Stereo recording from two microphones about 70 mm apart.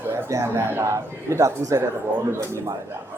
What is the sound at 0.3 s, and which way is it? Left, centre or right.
A man's voice, right.